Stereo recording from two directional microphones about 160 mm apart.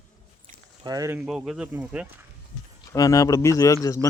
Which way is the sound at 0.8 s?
20° right (ahead or behind).